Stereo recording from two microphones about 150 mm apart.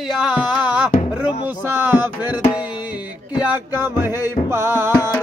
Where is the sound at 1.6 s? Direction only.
15° right (ahead or behind).